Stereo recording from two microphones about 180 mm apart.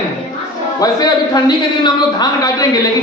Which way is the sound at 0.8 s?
20° left (ahead or behind).